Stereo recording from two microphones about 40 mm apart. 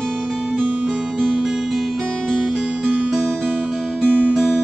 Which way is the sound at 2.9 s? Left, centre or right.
Centre.